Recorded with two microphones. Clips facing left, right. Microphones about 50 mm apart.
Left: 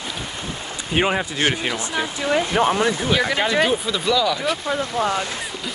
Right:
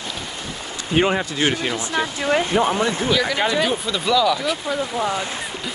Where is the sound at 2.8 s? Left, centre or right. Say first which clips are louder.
Even; left.